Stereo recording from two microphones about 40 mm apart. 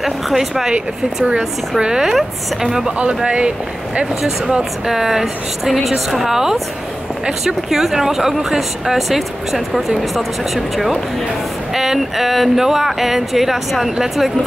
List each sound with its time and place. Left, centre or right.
0.0 s speech: centre
0.7 s speech: right
1.8 s speech: centre
3.3 s speech: right
4.8 s speech: centre